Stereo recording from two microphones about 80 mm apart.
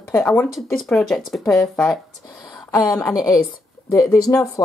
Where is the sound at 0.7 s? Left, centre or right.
Centre.